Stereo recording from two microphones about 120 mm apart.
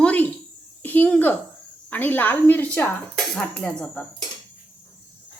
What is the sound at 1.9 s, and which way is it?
Speech, 15° left (ahead or behind).